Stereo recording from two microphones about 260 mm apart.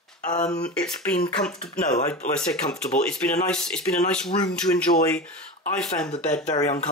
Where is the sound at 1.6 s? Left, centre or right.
Left.